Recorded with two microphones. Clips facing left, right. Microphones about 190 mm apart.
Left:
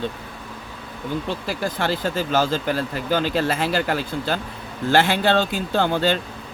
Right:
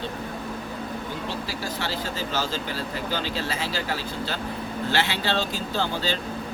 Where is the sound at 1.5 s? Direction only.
50° left (ahead or behind).